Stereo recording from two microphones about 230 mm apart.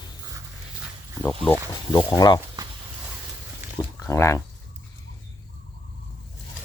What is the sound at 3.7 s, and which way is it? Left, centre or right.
Speech, centre.